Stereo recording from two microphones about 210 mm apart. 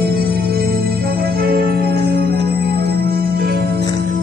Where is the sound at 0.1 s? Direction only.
50° right (ahead or behind).